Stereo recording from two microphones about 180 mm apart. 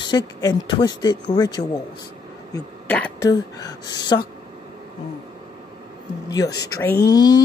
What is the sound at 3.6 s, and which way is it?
Speech, 25° left (ahead or behind).